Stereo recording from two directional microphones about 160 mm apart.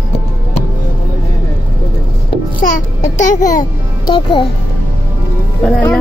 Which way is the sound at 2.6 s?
55° left (ahead or behind).